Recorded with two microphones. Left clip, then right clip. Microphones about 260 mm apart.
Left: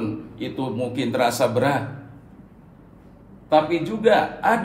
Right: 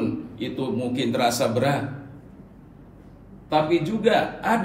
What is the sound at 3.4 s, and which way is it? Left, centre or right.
A man's voice, left.